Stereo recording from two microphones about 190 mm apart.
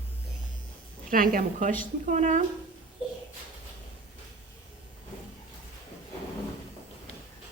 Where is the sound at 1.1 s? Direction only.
45° right (ahead or behind).